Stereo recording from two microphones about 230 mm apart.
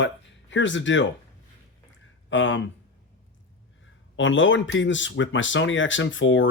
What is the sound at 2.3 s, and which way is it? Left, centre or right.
Speech, left.